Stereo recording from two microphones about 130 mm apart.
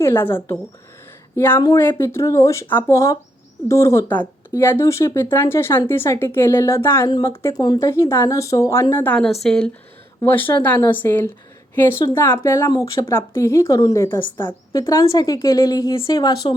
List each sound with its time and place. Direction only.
0.0 s speech: 15° left (ahead or behind)
7.6 s speech: 30° left (ahead or behind)
7.9 s speech: 20° left (ahead or behind)
9.2 s speech: centre (ahead or behind)
10.2 s speech: 15° left (ahead or behind)